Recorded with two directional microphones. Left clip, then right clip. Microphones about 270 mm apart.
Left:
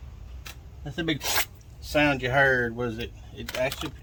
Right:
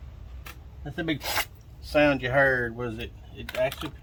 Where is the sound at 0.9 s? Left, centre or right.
Centre.